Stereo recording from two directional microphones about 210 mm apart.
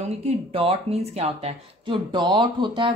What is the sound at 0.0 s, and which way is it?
Speech, 30° right (ahead or behind).